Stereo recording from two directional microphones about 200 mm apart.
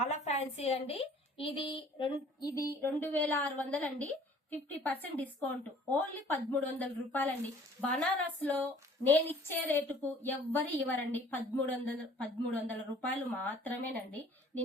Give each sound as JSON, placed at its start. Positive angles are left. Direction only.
{"t": 0.0, "sound": "a woman's voice", "side_deg": 35}
{"t": 2.8, "sound": "a woman's voice", "side_deg": 10}